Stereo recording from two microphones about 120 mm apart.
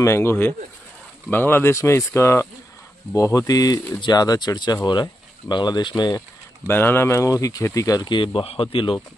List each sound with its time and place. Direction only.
0.0 s speech: 20° left (ahead or behind); by 6.2 s 35° left (ahead or behind)
6.7 s speech: 20° left (ahead or behind); by 9.0 s 45° left (ahead or behind)